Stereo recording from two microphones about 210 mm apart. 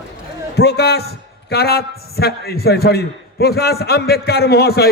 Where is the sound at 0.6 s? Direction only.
50° left (ahead or behind).